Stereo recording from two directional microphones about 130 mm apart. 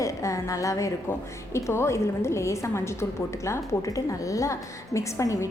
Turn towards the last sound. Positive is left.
turn(degrees=25)  # may be behind; listen again after turning